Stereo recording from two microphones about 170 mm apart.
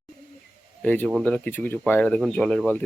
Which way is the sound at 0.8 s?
10° left (ahead or behind).